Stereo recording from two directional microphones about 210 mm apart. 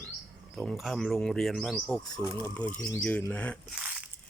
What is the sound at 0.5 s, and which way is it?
Speech, centre (ahead or behind).